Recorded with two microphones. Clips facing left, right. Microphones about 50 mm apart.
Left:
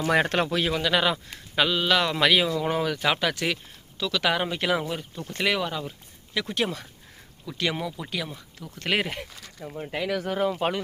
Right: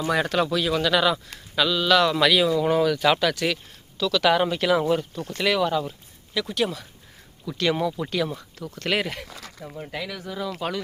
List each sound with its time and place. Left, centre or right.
0.1 s speech: left
0.7 s speech: centre
4.3 s speech: centre
4.8 s speech: centre
5.4 s speech: centre
5.6 s speech: centre
6.3 s speech: left
7.4 s speech: centre
8.8 s speech: centre
10.1 s speech: left
10.5 s speech: left